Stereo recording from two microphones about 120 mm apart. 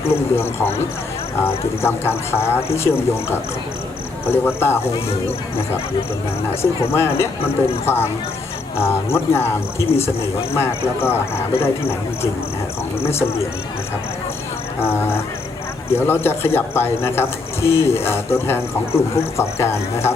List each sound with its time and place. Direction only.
0.1 s a man's voice: 20° left (ahead or behind)
6.6 s a man's voice: 20° left (ahead or behind)
14.8 s a man's voice: 20° left (ahead or behind)